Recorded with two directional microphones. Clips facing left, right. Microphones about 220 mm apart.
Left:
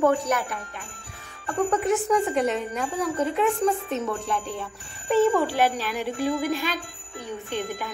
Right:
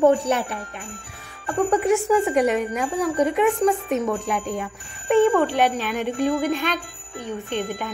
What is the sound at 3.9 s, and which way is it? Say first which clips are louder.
Speech: right 4 dB; 15° right (ahead or behind).